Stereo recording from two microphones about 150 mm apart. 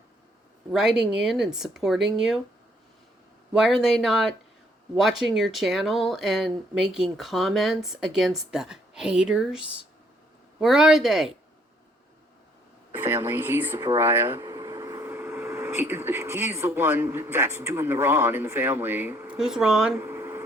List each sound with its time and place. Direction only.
0.7 s speech: 5° right (ahead or behind)
3.5 s speech: 5° right (ahead or behind)
12.9 s speech: 15° right (ahead or behind)
19.4 s speech: 5° right (ahead or behind)
20.0 s a sound: 15° right (ahead or behind)